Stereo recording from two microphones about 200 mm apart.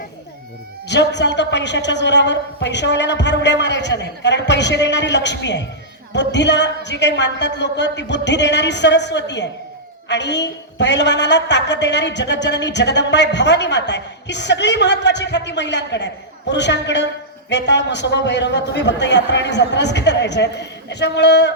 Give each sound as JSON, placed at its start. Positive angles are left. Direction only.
{"t": 0.9, "sound": "a woman's voice", "side_deg": 60}